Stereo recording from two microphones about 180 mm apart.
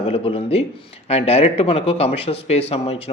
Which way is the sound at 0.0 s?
30° left (ahead or behind).